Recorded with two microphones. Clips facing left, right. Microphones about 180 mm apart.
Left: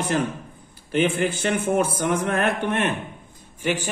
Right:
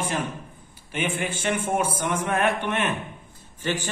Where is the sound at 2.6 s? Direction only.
35° left (ahead or behind).